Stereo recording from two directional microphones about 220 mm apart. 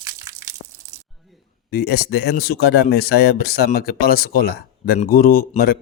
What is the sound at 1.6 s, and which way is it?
Speech, 45° left (ahead or behind).